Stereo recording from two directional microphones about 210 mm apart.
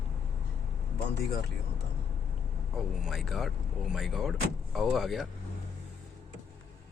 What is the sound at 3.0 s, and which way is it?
Speech, centre (ahead or behind).